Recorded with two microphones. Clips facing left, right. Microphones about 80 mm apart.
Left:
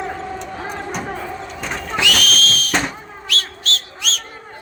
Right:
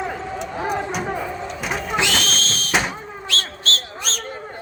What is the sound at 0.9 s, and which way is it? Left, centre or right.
Basketball bounce, centre.